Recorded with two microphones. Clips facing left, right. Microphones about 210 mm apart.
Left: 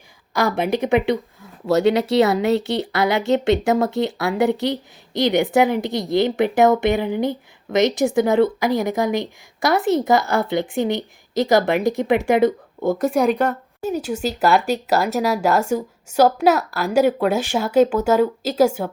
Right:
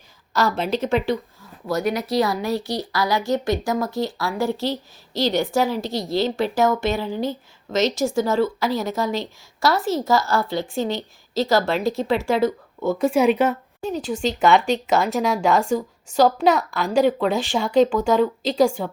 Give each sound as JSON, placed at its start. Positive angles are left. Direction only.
{"t": 0.3, "sound": "speech", "side_deg": 15}
{"t": 1.6, "sound": "speech", "side_deg": 25}
{"t": 3.4, "sound": "speech", "side_deg": 65}
{"t": 3.9, "sound": "speech", "side_deg": 20}
{"t": 13.0, "sound": "speech", "side_deg": 0}